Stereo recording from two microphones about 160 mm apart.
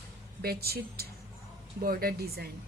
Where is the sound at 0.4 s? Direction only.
75° right (ahead or behind).